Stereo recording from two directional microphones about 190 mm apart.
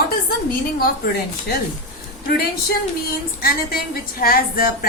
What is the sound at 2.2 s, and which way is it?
A woman's voice, 55° left (ahead or behind).